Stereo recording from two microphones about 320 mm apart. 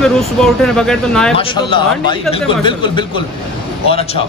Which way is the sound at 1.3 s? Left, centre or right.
Centre.